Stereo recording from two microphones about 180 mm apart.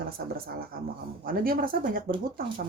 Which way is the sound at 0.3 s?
55° right (ahead or behind).